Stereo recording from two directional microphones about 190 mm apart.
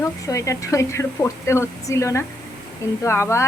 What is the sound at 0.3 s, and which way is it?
A woman's voice, 15° left (ahead or behind).